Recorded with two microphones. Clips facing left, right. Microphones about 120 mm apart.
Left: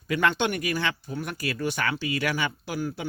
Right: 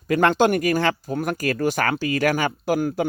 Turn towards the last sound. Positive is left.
turn(degrees=-50)  # may be behind; listen again after turning